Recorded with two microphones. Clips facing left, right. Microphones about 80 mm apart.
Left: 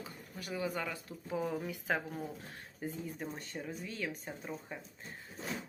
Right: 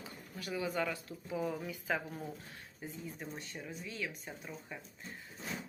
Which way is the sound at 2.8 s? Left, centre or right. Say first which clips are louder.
Left 4 dB; left.